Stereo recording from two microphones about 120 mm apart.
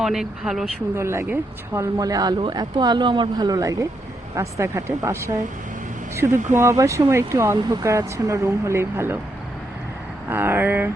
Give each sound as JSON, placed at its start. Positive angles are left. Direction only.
{"t": 0.0, "sound": "speech", "side_deg": -5}
{"t": 0.9, "sound": "speech", "side_deg": -20}
{"t": 10.2, "sound": "speech", "side_deg": -20}